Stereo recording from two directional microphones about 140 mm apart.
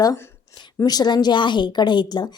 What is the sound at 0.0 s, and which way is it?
A woman's voice, 25° left (ahead or behind).